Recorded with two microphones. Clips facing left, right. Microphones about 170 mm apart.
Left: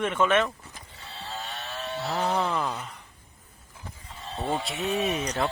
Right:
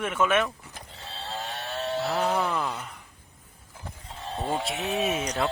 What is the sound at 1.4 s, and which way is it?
Vehicle, 35° right (ahead or behind).